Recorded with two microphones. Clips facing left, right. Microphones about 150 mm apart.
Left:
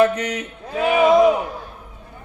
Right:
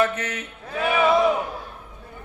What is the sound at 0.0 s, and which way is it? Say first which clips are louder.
Speech: left 6 dB; 15° left (ahead or behind).